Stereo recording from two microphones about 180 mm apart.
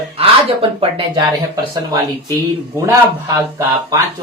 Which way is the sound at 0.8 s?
30° right (ahead or behind).